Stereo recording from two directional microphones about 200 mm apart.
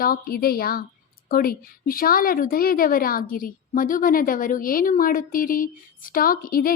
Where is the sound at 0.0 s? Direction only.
50° left (ahead or behind).